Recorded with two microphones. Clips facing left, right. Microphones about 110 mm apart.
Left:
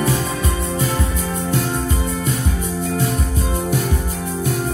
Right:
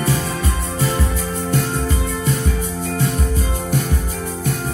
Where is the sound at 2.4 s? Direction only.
45° left (ahead or behind).